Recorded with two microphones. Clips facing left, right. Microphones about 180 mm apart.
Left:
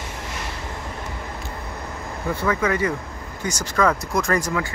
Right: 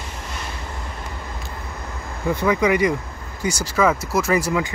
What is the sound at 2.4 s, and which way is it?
Speech, 15° right (ahead or behind).